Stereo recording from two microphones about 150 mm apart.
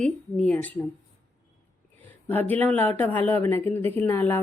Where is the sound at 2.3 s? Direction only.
10° left (ahead or behind).